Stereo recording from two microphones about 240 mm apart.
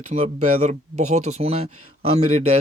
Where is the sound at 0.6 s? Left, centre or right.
Right.